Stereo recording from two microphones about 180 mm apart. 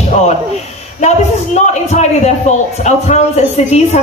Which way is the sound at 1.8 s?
40° left (ahead or behind).